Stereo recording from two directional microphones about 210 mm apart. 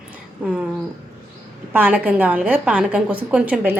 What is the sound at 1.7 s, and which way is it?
A woman's voice, 10° right (ahead or behind).